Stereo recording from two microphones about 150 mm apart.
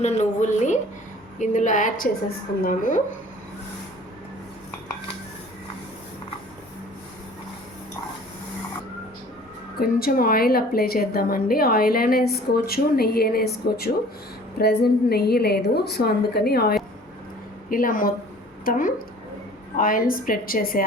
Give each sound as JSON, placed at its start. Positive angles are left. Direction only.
{"t": 0.0, "sound": "a woman's voice", "side_deg": 50}
{"t": 9.8, "sound": "a woman's voice", "side_deg": 80}
{"t": 17.7, "sound": "a woman's voice", "side_deg": 65}